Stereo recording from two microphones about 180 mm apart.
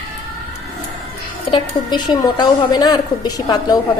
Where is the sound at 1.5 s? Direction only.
25° left (ahead or behind).